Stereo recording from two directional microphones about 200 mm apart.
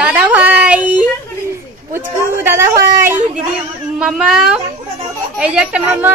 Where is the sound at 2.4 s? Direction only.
10° right (ahead or behind).